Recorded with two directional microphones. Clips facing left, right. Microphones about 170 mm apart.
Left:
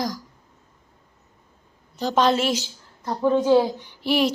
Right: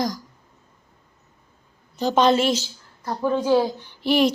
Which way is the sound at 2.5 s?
15° left (ahead or behind).